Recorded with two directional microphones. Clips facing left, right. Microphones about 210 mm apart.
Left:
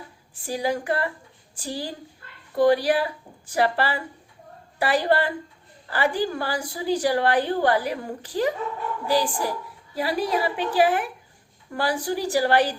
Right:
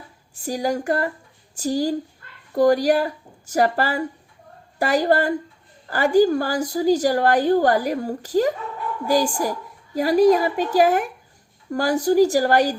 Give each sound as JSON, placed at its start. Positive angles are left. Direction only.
{"t": 0.4, "sound": "a woman's voice", "side_deg": -45}